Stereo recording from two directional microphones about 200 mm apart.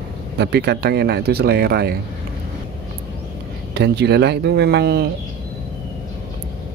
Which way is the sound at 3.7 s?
55° right (ahead or behind).